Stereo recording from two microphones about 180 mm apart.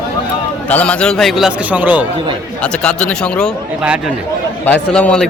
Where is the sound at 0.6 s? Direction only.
5° left (ahead or behind); by 2.1 s 10° right (ahead or behind).